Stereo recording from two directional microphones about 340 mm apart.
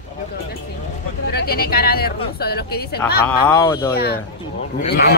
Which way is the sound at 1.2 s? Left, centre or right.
Left.